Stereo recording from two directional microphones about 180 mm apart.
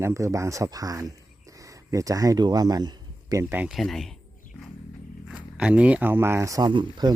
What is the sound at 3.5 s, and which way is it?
Speech, 5° right (ahead or behind).